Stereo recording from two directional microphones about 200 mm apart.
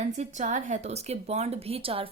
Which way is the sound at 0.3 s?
40° right (ahead or behind).